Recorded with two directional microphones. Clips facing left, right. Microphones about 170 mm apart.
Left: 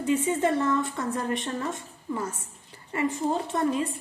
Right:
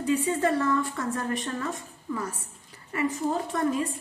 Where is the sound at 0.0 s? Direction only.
20° left (ahead or behind).